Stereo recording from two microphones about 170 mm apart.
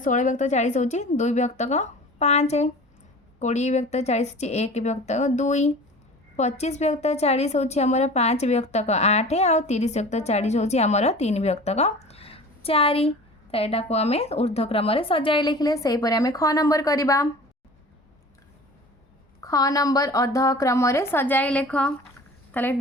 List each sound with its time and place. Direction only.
0.0 s a woman's voice: 50° left (ahead or behind); by 17.2 s 20° left (ahead or behind)
19.4 s a woman's voice: 20° left (ahead or behind)